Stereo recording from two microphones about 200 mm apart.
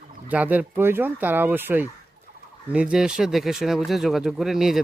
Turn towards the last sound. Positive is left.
turn(degrees=0)  # may be behind; listen again after turning